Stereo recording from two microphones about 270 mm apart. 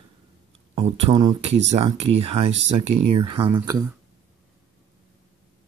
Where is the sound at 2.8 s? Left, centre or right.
Right.